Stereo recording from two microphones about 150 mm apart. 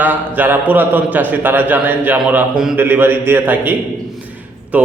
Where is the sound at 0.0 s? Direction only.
10° right (ahead or behind).